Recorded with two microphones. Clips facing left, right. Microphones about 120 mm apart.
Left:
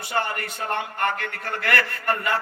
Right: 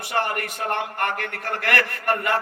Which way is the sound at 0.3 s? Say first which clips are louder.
Right 2 dB; 65° right (ahead or behind).